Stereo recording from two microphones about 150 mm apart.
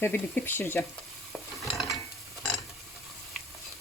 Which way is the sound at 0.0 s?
15° left (ahead or behind).